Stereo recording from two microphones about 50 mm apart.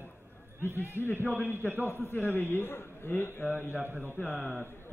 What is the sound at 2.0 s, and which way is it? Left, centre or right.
A man's voice, left.